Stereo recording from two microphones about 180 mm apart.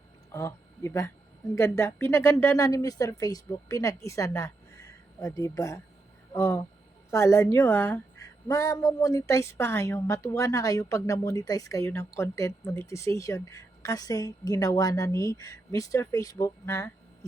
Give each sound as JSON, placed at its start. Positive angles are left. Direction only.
{"t": 0.3, "sound": "a woman's voice", "side_deg": 15}